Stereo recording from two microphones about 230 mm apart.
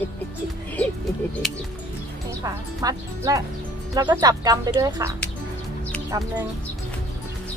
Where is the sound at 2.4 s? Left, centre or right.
Centre.